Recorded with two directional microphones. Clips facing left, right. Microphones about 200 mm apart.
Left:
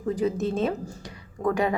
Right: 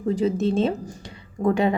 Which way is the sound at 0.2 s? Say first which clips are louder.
Right 3 dB; 25° right (ahead or behind).